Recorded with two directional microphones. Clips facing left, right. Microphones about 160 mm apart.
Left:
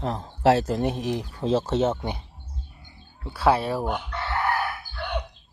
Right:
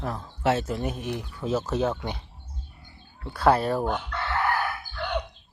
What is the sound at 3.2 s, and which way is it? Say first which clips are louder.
Chicken: even; 5° left (ahead or behind).